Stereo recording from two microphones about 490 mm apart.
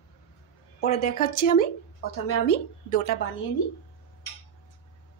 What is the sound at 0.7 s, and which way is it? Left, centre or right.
A woman's voice, centre.